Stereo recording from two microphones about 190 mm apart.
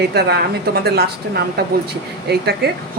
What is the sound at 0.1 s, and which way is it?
A woman's voice, 60° right (ahead or behind).